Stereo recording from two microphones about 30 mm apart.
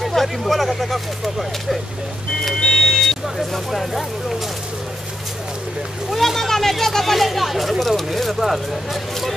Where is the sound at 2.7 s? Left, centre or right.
Centre.